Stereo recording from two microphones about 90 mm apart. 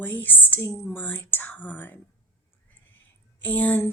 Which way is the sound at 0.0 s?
20° left (ahead or behind).